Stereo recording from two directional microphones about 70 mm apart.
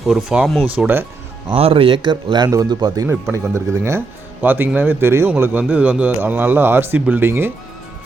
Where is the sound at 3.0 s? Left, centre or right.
Right.